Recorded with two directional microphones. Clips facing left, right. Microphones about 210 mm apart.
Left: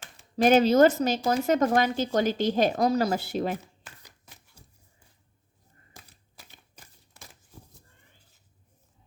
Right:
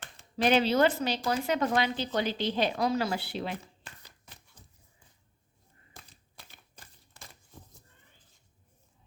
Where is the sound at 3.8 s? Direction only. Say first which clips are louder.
Even; 10° left (ahead or behind).